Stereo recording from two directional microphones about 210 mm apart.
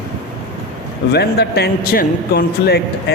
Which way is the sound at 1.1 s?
50° left (ahead or behind).